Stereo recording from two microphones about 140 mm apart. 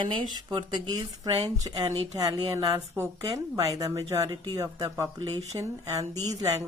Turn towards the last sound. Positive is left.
turn(degrees=-25)  # may be behind; listen again after turning